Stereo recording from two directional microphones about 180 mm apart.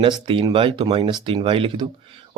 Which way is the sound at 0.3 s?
30° right (ahead or behind).